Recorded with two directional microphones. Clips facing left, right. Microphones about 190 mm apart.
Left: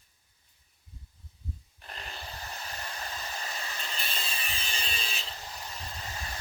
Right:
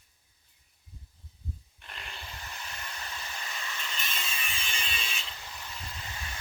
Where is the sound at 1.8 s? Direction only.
35° left (ahead or behind).